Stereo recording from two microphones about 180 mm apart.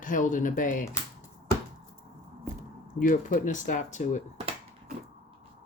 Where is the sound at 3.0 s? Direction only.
45° left (ahead or behind).